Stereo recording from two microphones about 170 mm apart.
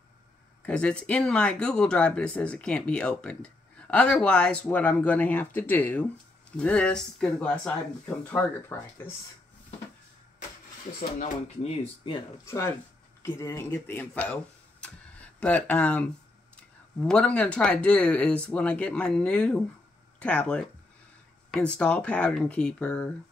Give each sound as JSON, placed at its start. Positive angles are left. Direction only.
{"t": 0.6, "sound": "speech", "side_deg": 5}
{"t": 11.0, "sound": "speech", "side_deg": 45}
{"t": 12.4, "sound": "speech", "side_deg": 15}